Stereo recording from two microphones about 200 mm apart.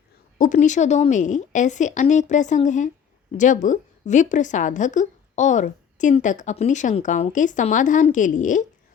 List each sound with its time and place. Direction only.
0.3 s a woman's voice: 40° left (ahead or behind)